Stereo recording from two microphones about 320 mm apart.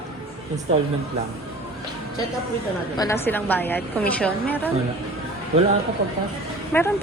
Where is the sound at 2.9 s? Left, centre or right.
Centre.